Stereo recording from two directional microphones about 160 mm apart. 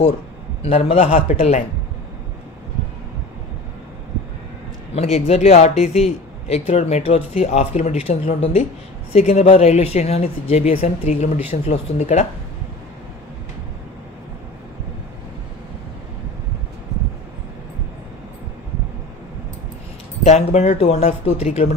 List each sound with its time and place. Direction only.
0.6 s speech: 40° left (ahead or behind)
4.9 s speech: 40° left (ahead or behind)
20.2 s speech: 45° left (ahead or behind)